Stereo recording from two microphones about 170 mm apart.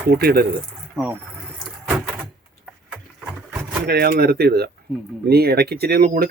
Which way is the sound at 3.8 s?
65° right (ahead or behind).